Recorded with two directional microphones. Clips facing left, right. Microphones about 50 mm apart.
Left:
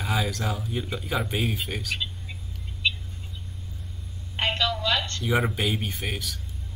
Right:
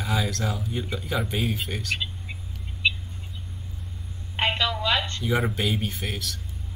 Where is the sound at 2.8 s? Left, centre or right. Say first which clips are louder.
Right 2 dB; centre.